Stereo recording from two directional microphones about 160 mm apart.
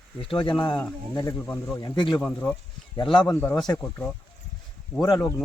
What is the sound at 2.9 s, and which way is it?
Speech, 30° left (ahead or behind).